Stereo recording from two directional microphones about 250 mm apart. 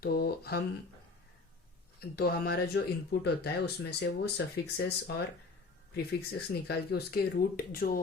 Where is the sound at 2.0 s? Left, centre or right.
Left.